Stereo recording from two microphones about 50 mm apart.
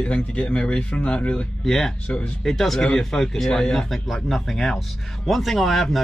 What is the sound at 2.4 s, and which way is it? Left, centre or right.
Speech, centre.